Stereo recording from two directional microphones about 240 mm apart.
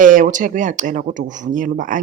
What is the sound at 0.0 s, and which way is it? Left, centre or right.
Speech, right.